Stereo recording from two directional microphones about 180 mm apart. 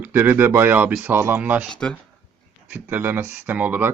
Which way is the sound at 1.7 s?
5° left (ahead or behind).